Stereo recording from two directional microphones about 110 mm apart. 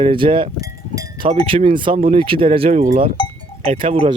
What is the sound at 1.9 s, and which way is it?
Speech, 70° right (ahead or behind).